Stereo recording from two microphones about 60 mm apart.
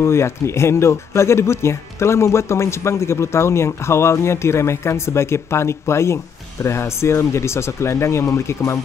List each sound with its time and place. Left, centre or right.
0.0 s speech: left